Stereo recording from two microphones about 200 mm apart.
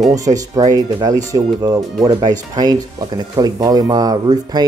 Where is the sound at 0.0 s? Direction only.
15° right (ahead or behind).